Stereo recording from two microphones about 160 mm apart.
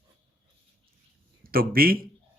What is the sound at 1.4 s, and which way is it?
Speech, 65° right (ahead or behind).